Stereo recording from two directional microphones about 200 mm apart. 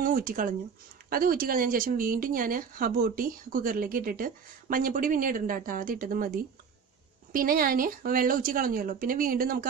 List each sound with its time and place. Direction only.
0.0 s speech: 45° right (ahead or behind)